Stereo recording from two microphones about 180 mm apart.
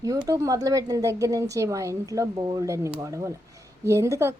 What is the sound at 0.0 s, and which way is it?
A woman's voice, 20° right (ahead or behind).